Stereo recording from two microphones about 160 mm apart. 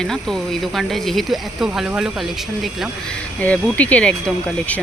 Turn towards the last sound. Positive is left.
turn(degrees=5)  # may be behind; listen again after turning